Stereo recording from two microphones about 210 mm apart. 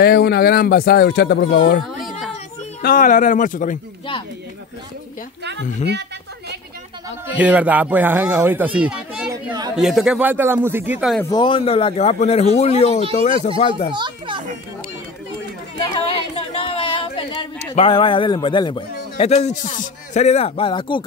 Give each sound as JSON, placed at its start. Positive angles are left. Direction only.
{"t": 0.0, "sound": "speech", "side_deg": 50}
{"t": 2.0, "sound": "a sound", "side_deg": 0}
{"t": 2.8, "sound": "speech", "side_deg": 40}
{"t": 7.3, "sound": "a child's voice", "side_deg": -5}
{"t": 11.2, "sound": "speech", "side_deg": 20}
{"t": 13.9, "sound": "children playing", "side_deg": -20}
{"t": 15.9, "sound": "a sound", "side_deg": 25}